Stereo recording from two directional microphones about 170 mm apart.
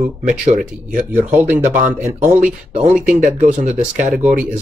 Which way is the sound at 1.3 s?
10° right (ahead or behind).